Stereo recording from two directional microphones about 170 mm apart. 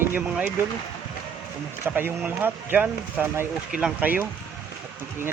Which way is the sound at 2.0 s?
10° right (ahead or behind).